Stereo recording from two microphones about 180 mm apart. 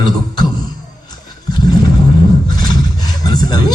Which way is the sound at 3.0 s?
20° left (ahead or behind).